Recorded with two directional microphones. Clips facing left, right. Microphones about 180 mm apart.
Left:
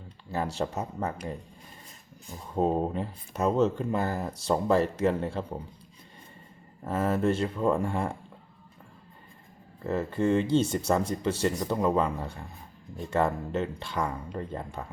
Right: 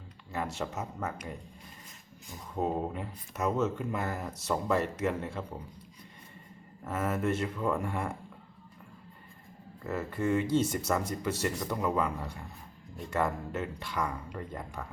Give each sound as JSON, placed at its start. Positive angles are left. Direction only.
{"t": 0.3, "sound": "speech", "side_deg": 35}
{"t": 6.8, "sound": "speech", "side_deg": 30}
{"t": 9.8, "sound": "speech", "side_deg": 30}